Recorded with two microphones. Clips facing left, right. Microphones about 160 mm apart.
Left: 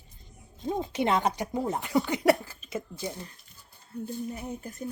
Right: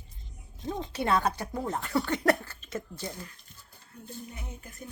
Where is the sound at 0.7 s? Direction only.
15° left (ahead or behind).